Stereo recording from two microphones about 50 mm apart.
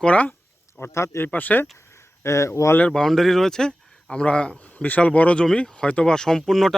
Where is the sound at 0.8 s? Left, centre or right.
Left.